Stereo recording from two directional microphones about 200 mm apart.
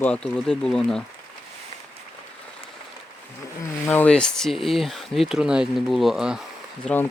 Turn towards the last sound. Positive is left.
turn(degrees=10)  # may be behind; listen again after turning